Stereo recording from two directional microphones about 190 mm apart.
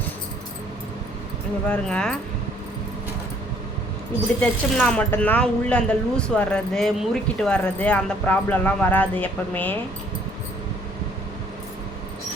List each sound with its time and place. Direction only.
1.6 s speech: 5° left (ahead or behind)
4.4 s speech: 5° left (ahead or behind)